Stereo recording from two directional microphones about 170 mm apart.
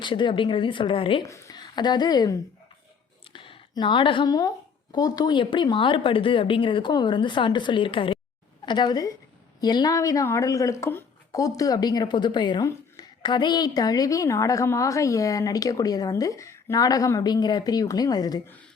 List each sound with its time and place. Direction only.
0.0 s speech: 30° left (ahead or behind)
1.2 s a woman's voice: 20° left (ahead or behind)